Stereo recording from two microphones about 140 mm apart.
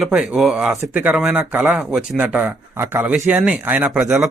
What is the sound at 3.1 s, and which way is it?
Speech, centre (ahead or behind).